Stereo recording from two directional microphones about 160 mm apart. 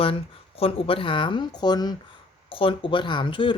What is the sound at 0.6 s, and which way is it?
Speech, 35° left (ahead or behind).